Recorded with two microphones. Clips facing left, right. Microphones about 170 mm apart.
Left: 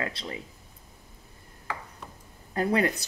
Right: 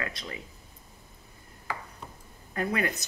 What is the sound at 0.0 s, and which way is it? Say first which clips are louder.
Speech: left 3 dB; 30° left (ahead or behind).